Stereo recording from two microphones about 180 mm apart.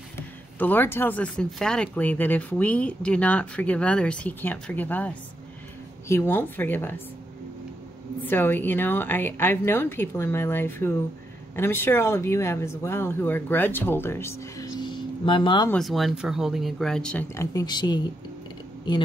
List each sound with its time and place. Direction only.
0.6 s speech: 10° left (ahead or behind)
8.2 s speech: 10° left (ahead or behind)
14.8 s a sound: 25° left (ahead or behind)
15.7 s speech: centre (ahead or behind); by 18.0 s 25° left (ahead or behind)